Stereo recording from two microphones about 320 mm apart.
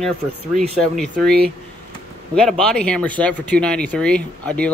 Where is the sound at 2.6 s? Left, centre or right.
Centre.